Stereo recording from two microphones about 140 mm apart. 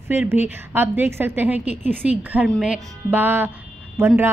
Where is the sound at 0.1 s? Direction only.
15° right (ahead or behind).